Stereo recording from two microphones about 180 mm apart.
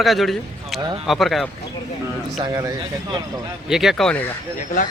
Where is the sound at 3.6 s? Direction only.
Centre (ahead or behind).